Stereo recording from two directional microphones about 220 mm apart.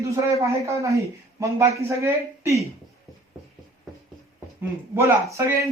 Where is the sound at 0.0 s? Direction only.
15° right (ahead or behind).